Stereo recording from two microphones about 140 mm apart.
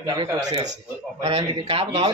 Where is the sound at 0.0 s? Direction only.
30° right (ahead or behind).